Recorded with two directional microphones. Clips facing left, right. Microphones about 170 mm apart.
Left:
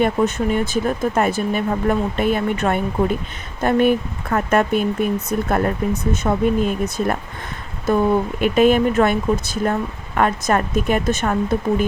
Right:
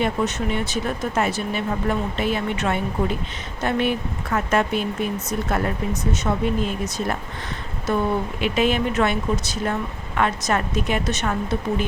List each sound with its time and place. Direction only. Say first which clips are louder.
0.0 s speech: left 5 dB; 50° left (ahead or behind)
8.4 s speech: left 7 dB; 50° left (ahead or behind)